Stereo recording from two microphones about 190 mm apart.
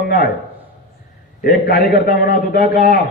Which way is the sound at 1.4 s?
55° left (ahead or behind).